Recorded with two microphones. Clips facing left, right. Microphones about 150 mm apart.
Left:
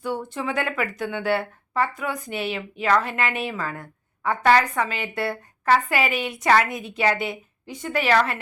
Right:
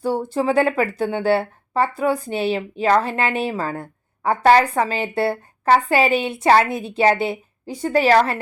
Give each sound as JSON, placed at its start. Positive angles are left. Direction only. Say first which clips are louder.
{"t": 0.0, "sound": "speech", "louder": "right 7 dB", "side_deg": -35}